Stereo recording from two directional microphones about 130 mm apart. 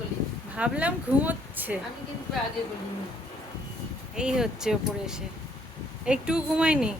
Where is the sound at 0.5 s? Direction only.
10° right (ahead or behind).